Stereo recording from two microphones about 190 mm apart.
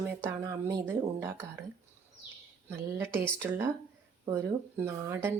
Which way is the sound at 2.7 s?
10° right (ahead or behind).